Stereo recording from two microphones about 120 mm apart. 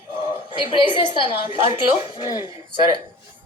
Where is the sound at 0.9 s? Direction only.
45° left (ahead or behind).